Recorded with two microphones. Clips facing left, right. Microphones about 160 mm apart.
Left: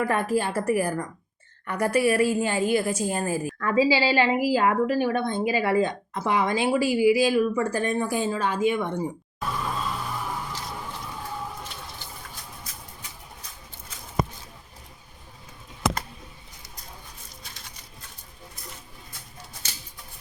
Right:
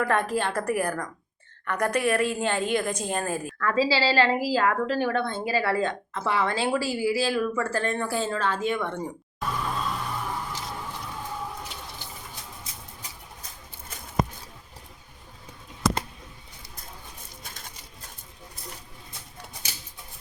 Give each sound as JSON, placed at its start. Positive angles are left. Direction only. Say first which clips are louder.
{"t": 0.0, "sound": "a woman's voice", "louder": "left 1 dB", "side_deg": 10}
{"t": 9.4, "sound": "music", "louder": "even", "side_deg": 0}
{"t": 17.4, "sound": "pigeon", "louder": "right 3 dB", "side_deg": -50}